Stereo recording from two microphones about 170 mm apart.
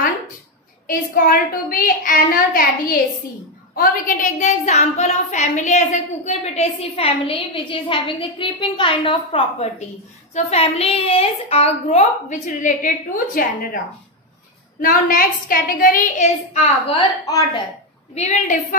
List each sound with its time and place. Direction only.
0.8 s a woman's voice: 55° left (ahead or behind)
14.8 s a woman's voice: 55° left (ahead or behind)
18.1 s a woman's voice: 45° left (ahead or behind)